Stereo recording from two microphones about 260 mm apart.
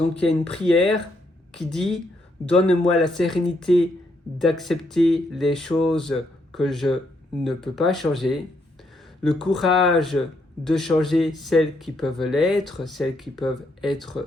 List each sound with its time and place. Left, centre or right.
0.5 s speech: centre